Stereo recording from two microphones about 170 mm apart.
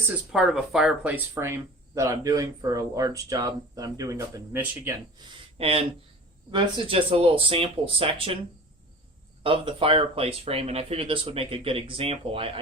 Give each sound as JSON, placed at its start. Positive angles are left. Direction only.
{"t": 0.3, "sound": "speech", "side_deg": 0}
{"t": 5.5, "sound": "speech", "side_deg": -35}
{"t": 9.4, "sound": "speech", "side_deg": -30}